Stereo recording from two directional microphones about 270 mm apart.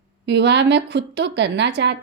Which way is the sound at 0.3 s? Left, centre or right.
Right.